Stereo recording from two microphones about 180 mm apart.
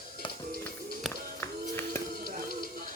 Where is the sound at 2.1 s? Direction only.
55° right (ahead or behind).